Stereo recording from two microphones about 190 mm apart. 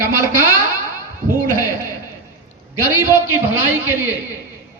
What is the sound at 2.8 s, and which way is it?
A man's voice, 10° right (ahead or behind).